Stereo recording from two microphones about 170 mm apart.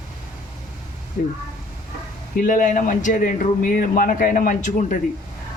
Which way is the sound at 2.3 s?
50° left (ahead or behind).